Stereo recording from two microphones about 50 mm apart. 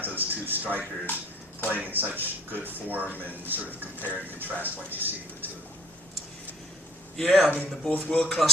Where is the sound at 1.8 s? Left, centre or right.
Right.